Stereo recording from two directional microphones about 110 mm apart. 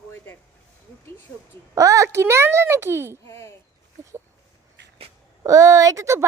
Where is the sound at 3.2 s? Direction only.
25° left (ahead or behind).